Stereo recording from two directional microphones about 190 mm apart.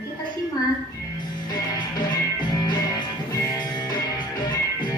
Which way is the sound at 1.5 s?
25° left (ahead or behind).